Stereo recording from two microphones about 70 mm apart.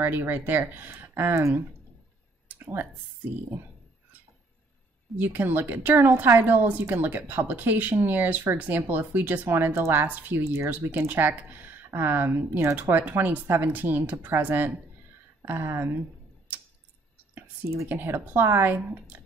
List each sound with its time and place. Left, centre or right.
0.0 s speech: right
2.4 s a sound: right
5.2 s speech: right
10.4 s speech: right
10.9 s speech: right
17.8 s speech: right